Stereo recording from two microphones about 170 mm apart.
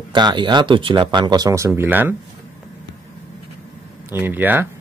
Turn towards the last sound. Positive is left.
turn(degrees=-10)  # may be behind; listen again after turning